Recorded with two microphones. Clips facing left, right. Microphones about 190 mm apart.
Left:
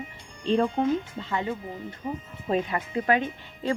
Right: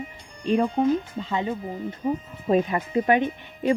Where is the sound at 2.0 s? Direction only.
40° right (ahead or behind).